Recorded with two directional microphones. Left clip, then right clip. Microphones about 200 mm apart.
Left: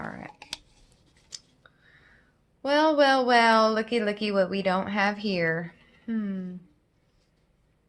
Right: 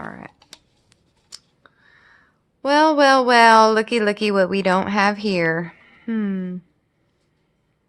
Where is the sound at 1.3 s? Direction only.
35° right (ahead or behind).